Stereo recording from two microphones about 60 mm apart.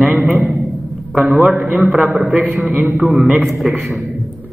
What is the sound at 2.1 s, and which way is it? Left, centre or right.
A man's voice, centre.